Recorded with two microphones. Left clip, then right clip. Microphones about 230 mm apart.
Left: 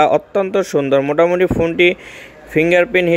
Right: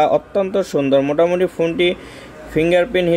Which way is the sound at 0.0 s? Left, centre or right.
Left.